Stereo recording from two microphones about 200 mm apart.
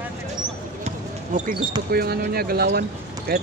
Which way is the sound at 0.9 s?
40° right (ahead or behind).